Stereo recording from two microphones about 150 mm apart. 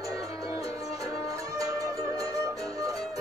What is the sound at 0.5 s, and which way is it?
Music, 20° right (ahead or behind).